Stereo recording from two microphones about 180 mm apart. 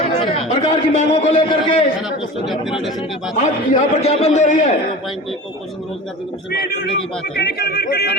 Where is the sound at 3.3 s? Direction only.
40° left (ahead or behind).